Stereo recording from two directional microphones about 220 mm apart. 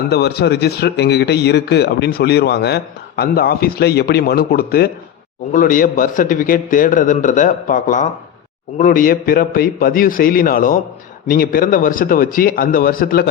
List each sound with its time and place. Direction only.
0.1 s a man's voice: 50° left (ahead or behind)